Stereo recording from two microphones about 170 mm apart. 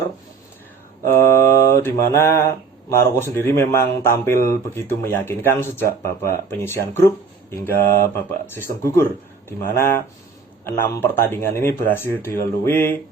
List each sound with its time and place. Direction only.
1.0 s mantra: 15° left (ahead or behind)
2.9 s speech: 15° left (ahead or behind)